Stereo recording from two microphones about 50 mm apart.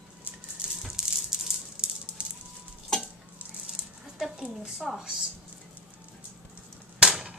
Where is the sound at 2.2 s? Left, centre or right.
Right.